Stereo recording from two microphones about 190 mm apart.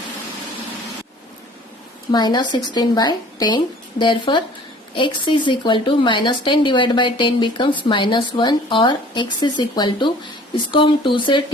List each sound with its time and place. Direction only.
2.1 s speech: 25° left (ahead or behind)